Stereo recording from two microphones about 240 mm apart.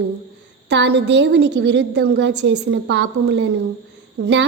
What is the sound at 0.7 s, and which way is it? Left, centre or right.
A woman's voice, right.